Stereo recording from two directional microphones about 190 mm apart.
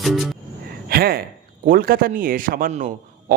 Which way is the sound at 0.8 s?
55° right (ahead or behind).